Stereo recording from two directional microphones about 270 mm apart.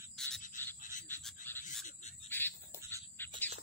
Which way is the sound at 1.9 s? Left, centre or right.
Left.